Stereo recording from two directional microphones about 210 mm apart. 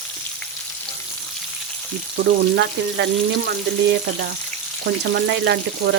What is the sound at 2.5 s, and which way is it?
Frying, 55° right (ahead or behind).